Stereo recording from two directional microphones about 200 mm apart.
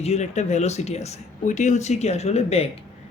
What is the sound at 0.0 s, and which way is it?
Speech, 35° left (ahead or behind).